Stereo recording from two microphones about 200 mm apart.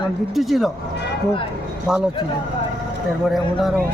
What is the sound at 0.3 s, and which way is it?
Speech, centre (ahead or behind).